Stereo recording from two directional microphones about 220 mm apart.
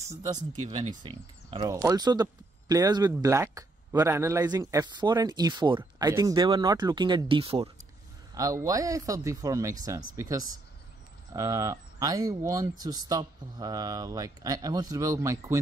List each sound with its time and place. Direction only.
0.5 s speech: 20° right (ahead or behind)